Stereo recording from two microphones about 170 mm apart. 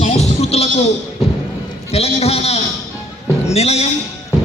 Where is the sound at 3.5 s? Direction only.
40° left (ahead or behind).